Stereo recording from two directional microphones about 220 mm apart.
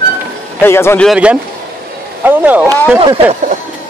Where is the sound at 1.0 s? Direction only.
5° right (ahead or behind).